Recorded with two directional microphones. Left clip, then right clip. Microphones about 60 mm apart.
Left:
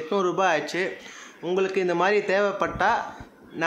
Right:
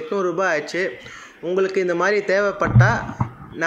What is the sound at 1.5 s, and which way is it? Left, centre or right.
A man's voice, right.